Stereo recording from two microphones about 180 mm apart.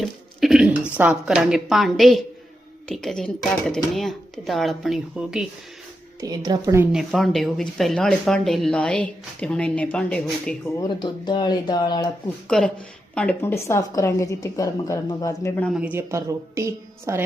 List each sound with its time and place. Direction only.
0.0 s a woman's voice: centre (ahead or behind)
6.1 s a woman's voice: 20° right (ahead or behind)
6.9 s speech: centre (ahead or behind)
10.8 s speech: 25° left (ahead or behind)
12.5 s a woman's voice: 5° left (ahead or behind)
15.6 s a woman's voice: 5° right (ahead or behind)